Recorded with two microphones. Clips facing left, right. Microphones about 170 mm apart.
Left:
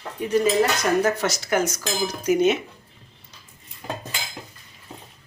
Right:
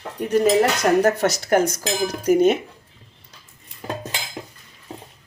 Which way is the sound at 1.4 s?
55° right (ahead or behind).